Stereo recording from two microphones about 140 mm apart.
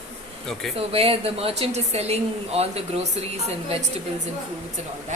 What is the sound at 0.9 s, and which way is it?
Speech, 45° right (ahead or behind).